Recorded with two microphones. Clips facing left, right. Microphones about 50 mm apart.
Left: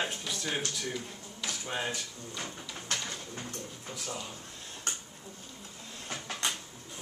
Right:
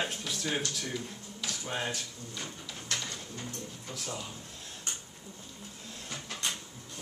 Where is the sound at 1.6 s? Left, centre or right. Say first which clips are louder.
Even; centre.